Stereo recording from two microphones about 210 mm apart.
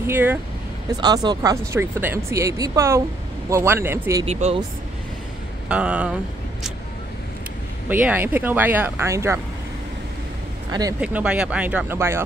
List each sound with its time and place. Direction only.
0.0 s speech: 10° right (ahead or behind)
4.3 s speech: 30° right (ahead or behind)
5.7 s speech: 5° right (ahead or behind)
7.9 s speech: 10° right (ahead or behind)
10.7 s speech: 15° right (ahead or behind)
11.0 s speech: 5° right (ahead or behind)